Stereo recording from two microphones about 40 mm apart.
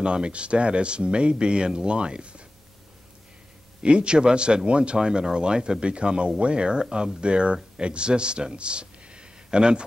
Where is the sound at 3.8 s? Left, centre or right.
Right.